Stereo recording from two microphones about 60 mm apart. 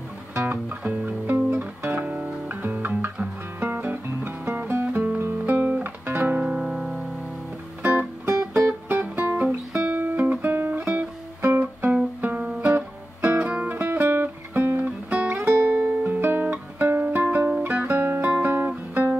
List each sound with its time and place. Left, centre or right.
0.5 s music: right
6.4 s music: centre
7.8 s music: right
9.8 s guitar: right
12.2 s music: right
13.7 s music: right
15.3 s guitar: right
17.6 s music: right
18.4 s guitar: right